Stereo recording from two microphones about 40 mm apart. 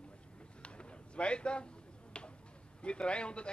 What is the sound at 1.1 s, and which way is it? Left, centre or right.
Speech, left.